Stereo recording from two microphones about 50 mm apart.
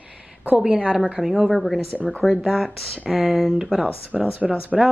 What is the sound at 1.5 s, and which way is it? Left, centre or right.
Speech, centre.